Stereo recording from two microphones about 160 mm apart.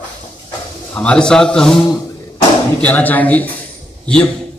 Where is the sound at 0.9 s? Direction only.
5° left (ahead or behind).